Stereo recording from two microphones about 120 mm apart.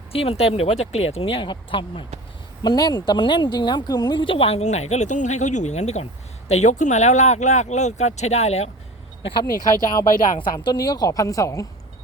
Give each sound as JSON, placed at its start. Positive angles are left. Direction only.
{"t": 0.1, "sound": "speech", "side_deg": 55}
{"t": 2.6, "sound": "speech", "side_deg": 35}
{"t": 9.3, "sound": "speech", "side_deg": 35}